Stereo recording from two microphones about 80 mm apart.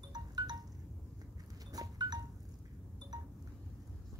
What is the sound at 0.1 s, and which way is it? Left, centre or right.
Wind chime, right.